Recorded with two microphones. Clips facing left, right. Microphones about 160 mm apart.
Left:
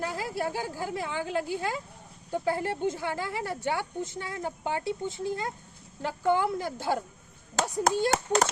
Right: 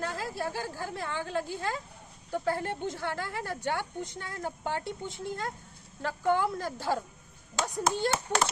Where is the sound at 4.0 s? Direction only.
15° left (ahead or behind).